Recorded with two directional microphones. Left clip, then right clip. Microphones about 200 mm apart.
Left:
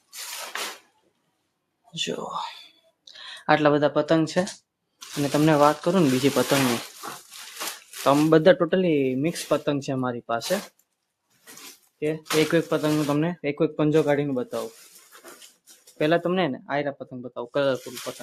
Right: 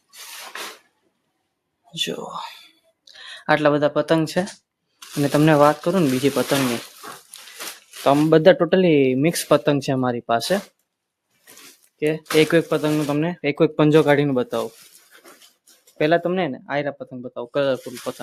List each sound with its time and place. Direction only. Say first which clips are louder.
1.9 s speech: right 3 dB; 15° right (ahead or behind)
2.2 s a sound: even; centre (ahead or behind)
4.9 s speech: right 4 dB; 20° right (ahead or behind)
5.8 s speech: right 2 dB; 5° right (ahead or behind)
8.0 s speech: right 3 dB; 10° right (ahead or behind)
11.9 s speech: right 5 dB; 25° right (ahead or behind)
16.0 s speech: right 3 dB; 10° right (ahead or behind)